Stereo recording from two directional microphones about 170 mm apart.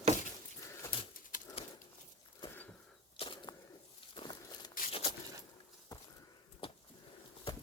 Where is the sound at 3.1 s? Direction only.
30° left (ahead or behind).